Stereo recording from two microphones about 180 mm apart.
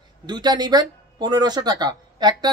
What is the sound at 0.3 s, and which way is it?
Speech, 25° right (ahead or behind).